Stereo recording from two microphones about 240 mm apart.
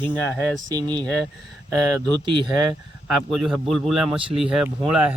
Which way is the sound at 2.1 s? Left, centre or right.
Centre.